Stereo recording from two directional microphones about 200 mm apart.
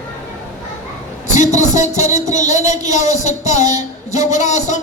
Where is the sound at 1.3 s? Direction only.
35° left (ahead or behind).